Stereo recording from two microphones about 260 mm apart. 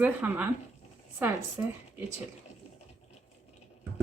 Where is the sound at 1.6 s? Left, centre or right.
Centre.